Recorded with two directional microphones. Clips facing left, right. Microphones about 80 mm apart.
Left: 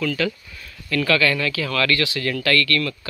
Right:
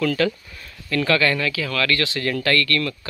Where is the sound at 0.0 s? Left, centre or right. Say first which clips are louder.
Right 3 dB; right.